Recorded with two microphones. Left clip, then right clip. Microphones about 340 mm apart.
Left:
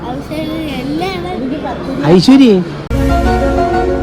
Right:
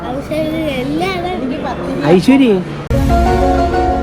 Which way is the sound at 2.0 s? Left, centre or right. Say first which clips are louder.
Left 3 dB; centre.